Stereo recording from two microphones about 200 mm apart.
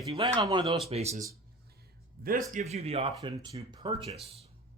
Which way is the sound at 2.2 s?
45° right (ahead or behind).